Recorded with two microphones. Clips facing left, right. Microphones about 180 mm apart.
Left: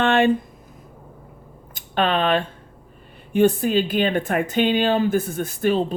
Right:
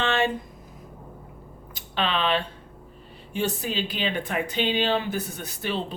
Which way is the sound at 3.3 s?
55° left (ahead or behind).